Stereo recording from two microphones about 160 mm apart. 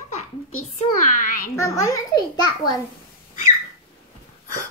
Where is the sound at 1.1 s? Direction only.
55° left (ahead or behind).